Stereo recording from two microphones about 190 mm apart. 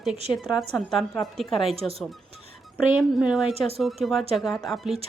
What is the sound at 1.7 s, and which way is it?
Speech, 30° right (ahead or behind).